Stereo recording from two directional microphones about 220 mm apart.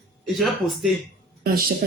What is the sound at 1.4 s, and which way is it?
Speech, 45° right (ahead or behind).